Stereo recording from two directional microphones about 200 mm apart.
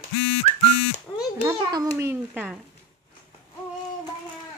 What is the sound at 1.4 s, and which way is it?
A child's voice, 20° right (ahead or behind).